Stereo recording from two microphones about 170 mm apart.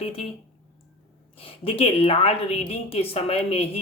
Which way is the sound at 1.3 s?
35° left (ahead or behind).